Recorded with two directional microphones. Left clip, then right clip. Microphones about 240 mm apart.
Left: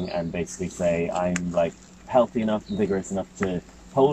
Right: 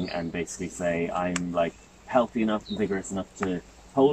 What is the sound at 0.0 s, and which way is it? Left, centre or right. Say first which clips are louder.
Speech: left 3 dB; centre.